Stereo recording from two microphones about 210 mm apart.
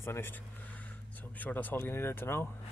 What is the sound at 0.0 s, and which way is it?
Speech, 10° left (ahead or behind).